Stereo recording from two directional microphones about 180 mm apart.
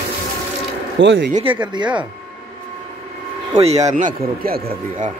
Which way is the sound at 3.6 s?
40° right (ahead or behind).